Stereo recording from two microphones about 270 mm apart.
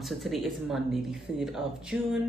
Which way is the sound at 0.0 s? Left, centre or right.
Centre.